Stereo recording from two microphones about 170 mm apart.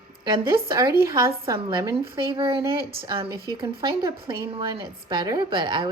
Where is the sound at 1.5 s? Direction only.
30° right (ahead or behind).